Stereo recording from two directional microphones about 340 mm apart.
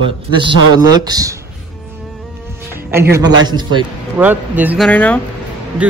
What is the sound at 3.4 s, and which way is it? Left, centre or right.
Speech, centre.